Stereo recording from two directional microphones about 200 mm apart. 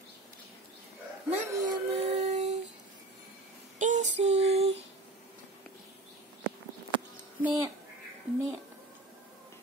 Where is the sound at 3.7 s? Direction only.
40° right (ahead or behind).